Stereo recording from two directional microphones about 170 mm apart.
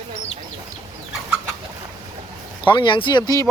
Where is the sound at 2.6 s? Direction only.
30° left (ahead or behind).